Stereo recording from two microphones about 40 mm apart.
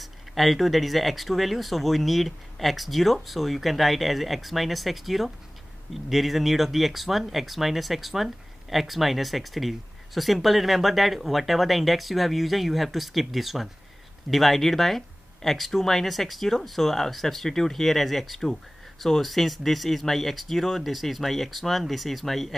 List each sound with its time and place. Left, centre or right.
0.0 s speech: centre